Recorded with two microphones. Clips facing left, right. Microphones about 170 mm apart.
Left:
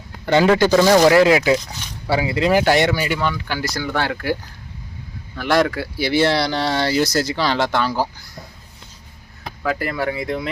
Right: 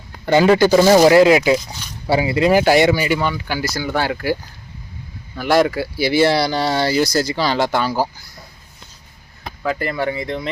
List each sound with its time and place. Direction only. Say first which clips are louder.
0.3 s speech: right 2 dB; 5° right (ahead or behind)
2.4 s speech: right 3 dB; 5° right (ahead or behind)
9.6 s speech: right 1 dB; 5° left (ahead or behind)